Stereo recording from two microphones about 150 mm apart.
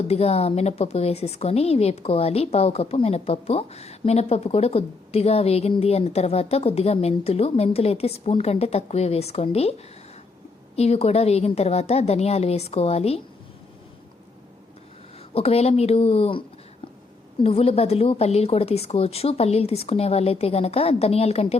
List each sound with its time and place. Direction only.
0.1 s a woman's voice: 45° left (ahead or behind)
10.8 s a woman's voice: 45° left (ahead or behind)
15.4 s speech: 45° left (ahead or behind)
17.4 s a woman's voice: 40° left (ahead or behind)